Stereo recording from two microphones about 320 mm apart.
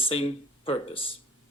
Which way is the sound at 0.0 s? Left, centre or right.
Centre.